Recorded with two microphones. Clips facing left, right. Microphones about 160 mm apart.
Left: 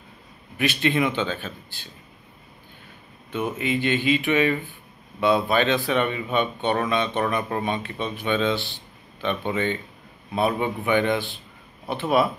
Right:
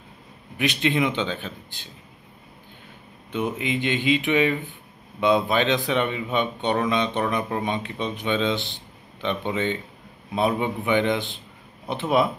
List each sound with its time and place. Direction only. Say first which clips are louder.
0.6 s a man's voice: even; 20° right (ahead or behind)
3.3 s a man's voice: even; 15° right (ahead or behind)